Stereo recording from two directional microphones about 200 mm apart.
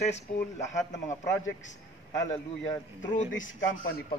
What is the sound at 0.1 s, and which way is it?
Speech, 35° left (ahead or behind).